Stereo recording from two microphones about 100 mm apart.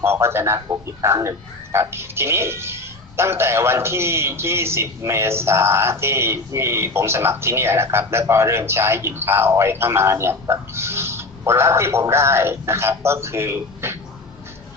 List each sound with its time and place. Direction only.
0.0 s speech: 25° right (ahead or behind)